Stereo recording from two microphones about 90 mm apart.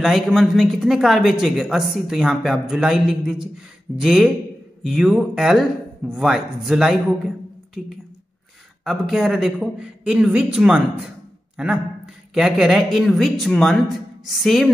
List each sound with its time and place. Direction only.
0.0 s speech: 5° right (ahead or behind)
8.8 s a man's voice: 5° right (ahead or behind)